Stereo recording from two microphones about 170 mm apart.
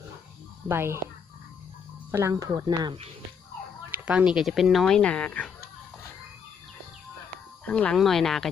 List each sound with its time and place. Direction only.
0.7 s speech: 15° right (ahead or behind)
2.1 s speech: 20° right (ahead or behind)
3.9 s speech: 5° right (ahead or behind)
7.6 s speech: 5° left (ahead or behind)